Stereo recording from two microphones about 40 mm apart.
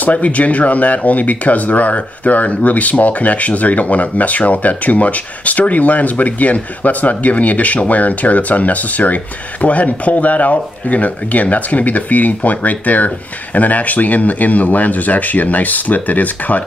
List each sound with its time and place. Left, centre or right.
0.0 s speech: left